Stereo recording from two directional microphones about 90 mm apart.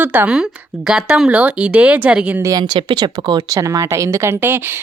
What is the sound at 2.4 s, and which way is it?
Speech, 40° right (ahead or behind).